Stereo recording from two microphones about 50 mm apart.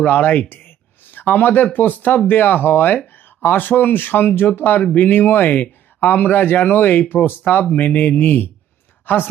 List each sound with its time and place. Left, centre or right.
0.0 s speech: left